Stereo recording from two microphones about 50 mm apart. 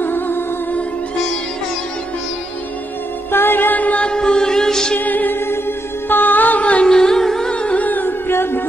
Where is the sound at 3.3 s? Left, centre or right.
Left.